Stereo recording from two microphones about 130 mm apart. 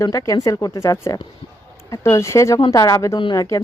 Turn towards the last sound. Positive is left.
turn(degrees=30)  # may be behind; listen again after turning